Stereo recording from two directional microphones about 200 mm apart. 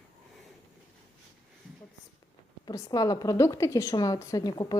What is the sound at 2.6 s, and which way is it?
A woman's voice, 15° left (ahead or behind).